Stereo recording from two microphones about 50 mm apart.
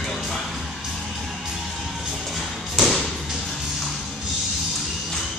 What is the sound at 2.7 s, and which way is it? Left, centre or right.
Thump, centre.